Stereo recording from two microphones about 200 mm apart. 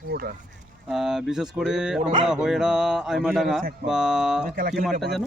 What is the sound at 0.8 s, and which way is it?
Speech, centre (ahead or behind).